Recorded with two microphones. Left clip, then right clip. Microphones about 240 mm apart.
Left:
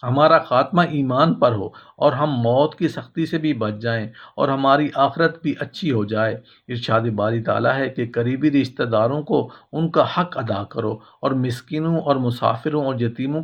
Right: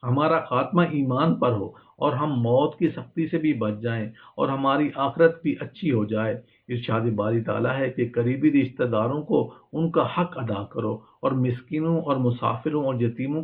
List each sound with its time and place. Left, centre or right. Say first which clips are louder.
0.0 s speech: left 8 dB; left